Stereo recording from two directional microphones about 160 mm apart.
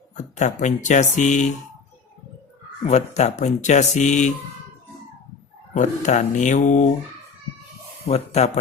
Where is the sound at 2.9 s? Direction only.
45° left (ahead or behind).